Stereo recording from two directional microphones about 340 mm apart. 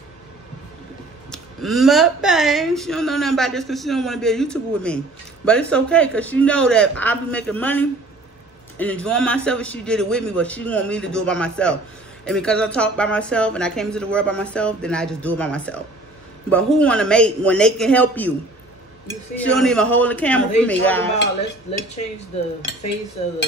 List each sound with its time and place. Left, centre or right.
1.3 s speech: centre
19.6 s speech: centre
21.4 s cutlery: centre